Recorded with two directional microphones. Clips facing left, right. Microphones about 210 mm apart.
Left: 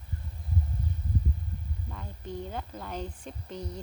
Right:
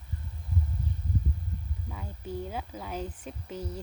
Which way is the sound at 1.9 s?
5° right (ahead or behind).